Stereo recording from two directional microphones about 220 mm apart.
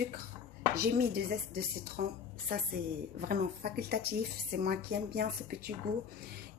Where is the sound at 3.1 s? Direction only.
40° right (ahead or behind).